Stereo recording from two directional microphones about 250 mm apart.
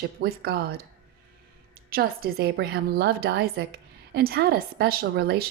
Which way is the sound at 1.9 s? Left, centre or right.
Right.